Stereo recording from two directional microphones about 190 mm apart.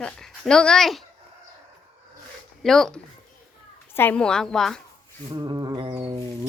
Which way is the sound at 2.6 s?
Centre (ahead or behind).